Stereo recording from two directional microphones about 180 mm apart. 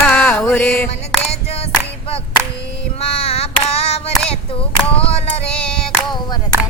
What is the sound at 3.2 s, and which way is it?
Child singing, 35° left (ahead or behind).